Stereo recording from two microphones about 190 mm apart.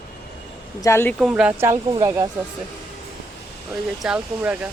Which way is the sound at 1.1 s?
5° right (ahead or behind).